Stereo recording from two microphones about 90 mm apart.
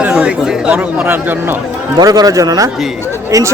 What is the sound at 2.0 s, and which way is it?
A man's voice, 45° right (ahead or behind).